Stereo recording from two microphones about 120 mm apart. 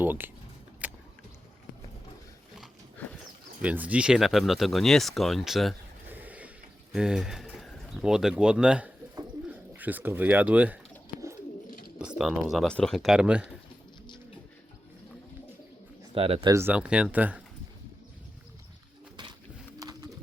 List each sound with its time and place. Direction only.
0.0 s speech: 15° right (ahead or behind)
0.8 s vehicle: 15° right (ahead or behind)
3.6 s speech: 10° right (ahead or behind)
6.1 s mechanisms: 15° right (ahead or behind)
6.9 s speech: 5° right (ahead or behind)
11.9 s speech: 5° right (ahead or behind)
16.1 s speech: 50° right (ahead or behind)
16.5 s speech: 20° right (ahead or behind)
16.7 s speech: 10° right (ahead or behind)
19.8 s pigeon: 30° right (ahead or behind)